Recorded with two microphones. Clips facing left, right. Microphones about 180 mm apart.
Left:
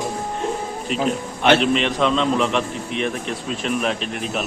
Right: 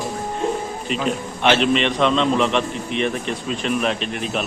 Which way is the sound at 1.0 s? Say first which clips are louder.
Left 1 dB; centre (ahead or behind).